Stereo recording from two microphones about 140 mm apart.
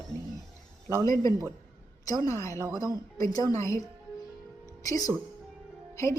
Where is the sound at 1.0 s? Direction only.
25° left (ahead or behind).